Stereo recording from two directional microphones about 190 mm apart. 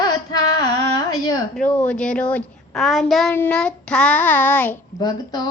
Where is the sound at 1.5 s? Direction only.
5° left (ahead or behind).